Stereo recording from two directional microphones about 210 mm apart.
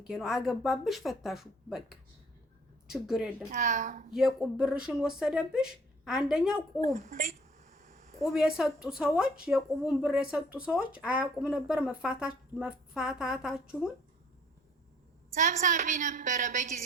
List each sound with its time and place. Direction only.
0.1 s a woman's voice: centre (ahead or behind)
3.5 s a woman's voice: 35° right (ahead or behind)
4.1 s a woman's voice: centre (ahead or behind)
6.8 s a sound: 35° right (ahead or behind)
8.3 s a woman's voice: 5° right (ahead or behind)
15.4 s a woman's voice: 35° right (ahead or behind)